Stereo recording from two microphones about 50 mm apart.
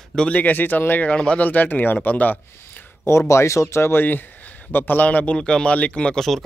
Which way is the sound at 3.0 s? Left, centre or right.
Left.